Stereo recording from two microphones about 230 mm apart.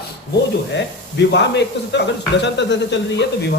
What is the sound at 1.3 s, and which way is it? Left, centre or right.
Speech, left.